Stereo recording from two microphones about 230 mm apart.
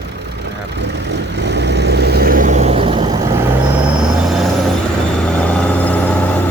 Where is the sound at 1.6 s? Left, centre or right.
Right.